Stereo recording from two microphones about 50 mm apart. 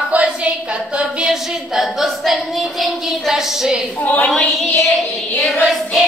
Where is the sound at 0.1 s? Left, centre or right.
Right.